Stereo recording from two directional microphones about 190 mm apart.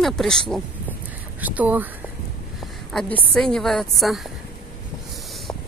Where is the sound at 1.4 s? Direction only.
10° right (ahead or behind).